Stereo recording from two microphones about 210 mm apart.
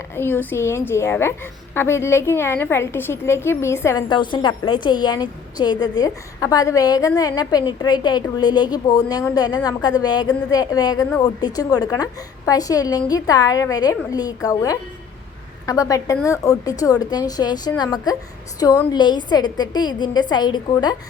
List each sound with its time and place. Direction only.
0.2 s a woman's voice: 10° left (ahead or behind)